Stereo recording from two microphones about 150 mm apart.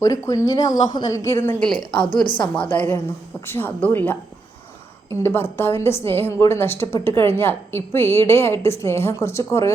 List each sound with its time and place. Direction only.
0.0 s a woman's voice: 20° left (ahead or behind); by 1.9 s 5° left (ahead or behind)
1.9 s a woman's voice: 35° left (ahead or behind)
2.6 s a woman's voice: 10° left (ahead or behind)
5.2 s a woman's voice: 15° left (ahead or behind)